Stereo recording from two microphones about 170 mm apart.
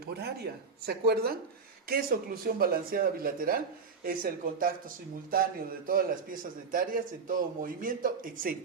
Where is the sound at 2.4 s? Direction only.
60° right (ahead or behind).